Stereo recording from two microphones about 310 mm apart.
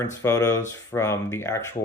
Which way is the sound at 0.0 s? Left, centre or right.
Centre.